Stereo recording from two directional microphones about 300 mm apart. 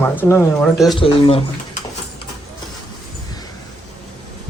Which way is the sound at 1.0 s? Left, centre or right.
Centre.